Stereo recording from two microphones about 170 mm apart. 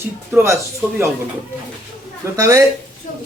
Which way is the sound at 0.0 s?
15° right (ahead or behind).